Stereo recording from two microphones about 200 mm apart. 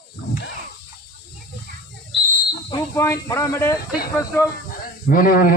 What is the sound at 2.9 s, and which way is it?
Speech, 15° left (ahead or behind).